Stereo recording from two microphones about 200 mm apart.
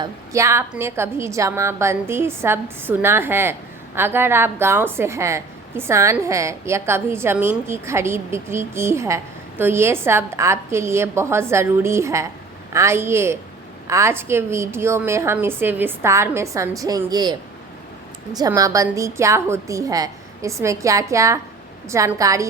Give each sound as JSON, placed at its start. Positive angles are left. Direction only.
{"t": 0.0, "sound": "a woman's voice", "side_deg": -15}
{"t": 18.3, "sound": "a woman's voice", "side_deg": -20}